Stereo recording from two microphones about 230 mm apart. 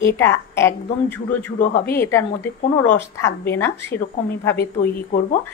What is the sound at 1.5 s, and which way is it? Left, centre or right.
Speech, left.